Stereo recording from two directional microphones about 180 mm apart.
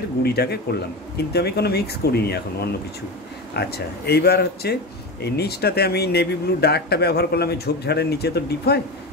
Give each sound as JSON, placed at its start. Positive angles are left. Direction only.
{"t": 0.2, "sound": "speech", "side_deg": 60}